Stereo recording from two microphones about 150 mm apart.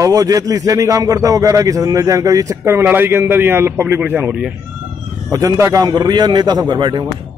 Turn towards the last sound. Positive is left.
turn(degrees=-30)  # may be behind; listen again after turning